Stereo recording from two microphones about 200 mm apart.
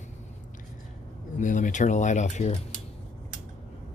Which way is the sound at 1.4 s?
40° left (ahead or behind).